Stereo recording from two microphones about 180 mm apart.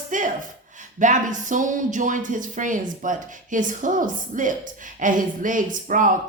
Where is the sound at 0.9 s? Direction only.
45° right (ahead or behind).